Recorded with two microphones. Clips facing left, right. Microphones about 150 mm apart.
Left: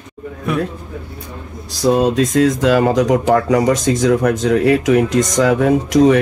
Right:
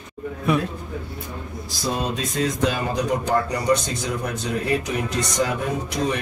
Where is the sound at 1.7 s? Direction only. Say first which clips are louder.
Left 12 dB; 80° left.